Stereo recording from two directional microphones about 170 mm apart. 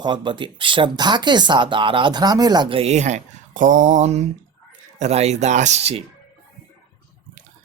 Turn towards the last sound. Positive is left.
turn(degrees=-40)  # may be behind; listen again after turning